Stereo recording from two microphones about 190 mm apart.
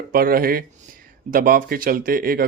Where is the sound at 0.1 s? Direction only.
50° right (ahead or behind).